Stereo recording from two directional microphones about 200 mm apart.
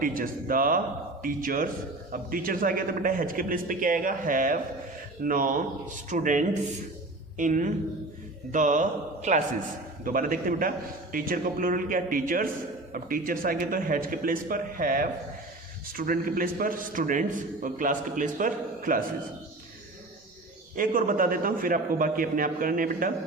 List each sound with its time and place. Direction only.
0.0 s a man's voice: 45° right (ahead or behind)
20.7 s a man's voice: 45° right (ahead or behind)